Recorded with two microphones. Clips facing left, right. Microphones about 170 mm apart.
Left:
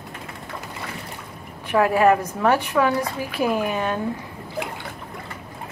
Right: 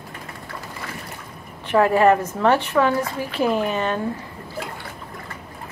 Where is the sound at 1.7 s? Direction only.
5° left (ahead or behind).